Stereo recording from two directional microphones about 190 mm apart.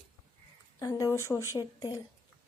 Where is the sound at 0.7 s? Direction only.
15° left (ahead or behind).